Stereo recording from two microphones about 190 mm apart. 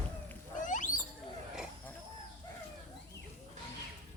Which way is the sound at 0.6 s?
45° left (ahead or behind).